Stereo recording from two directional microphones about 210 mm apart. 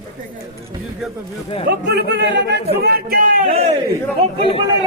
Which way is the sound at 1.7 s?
50° right (ahead or behind).